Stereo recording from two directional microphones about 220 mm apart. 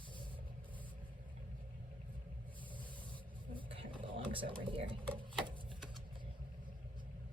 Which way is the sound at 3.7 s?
20° right (ahead or behind).